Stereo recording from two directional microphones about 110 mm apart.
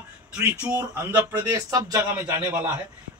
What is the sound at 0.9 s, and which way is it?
Speech, 20° right (ahead or behind).